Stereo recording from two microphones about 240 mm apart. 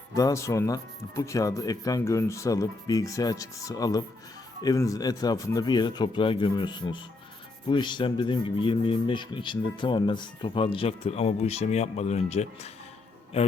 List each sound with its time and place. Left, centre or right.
0.1 s speech: centre